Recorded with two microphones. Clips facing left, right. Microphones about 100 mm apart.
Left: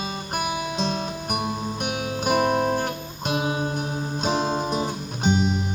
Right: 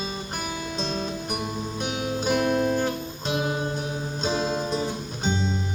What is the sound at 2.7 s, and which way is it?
Music, 50° left (ahead or behind).